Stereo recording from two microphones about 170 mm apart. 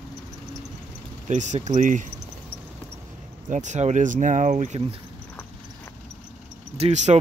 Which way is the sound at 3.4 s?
45° right (ahead or behind).